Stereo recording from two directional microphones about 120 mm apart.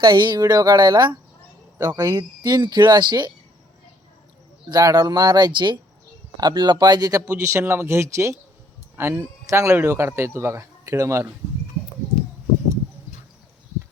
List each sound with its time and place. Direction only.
0.0 s speech: 40° right (ahead or behind)
4.7 s speech: 30° right (ahead or behind)
7.3 s a man's voice: 20° right (ahead or behind)